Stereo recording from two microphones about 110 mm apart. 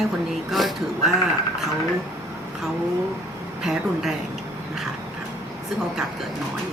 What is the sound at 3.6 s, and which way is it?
Speech, 5° right (ahead or behind).